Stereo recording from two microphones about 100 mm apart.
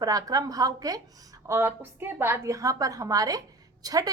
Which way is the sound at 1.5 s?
25° right (ahead or behind).